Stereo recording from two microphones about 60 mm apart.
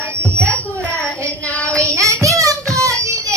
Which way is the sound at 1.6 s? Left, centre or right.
Left.